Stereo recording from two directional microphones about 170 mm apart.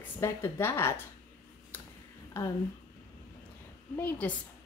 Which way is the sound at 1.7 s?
10° left (ahead or behind).